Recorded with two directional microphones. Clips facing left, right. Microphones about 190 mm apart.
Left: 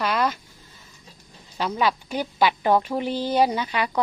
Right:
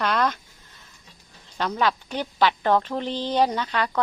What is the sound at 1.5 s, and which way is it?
A woman's voice, 10° left (ahead or behind).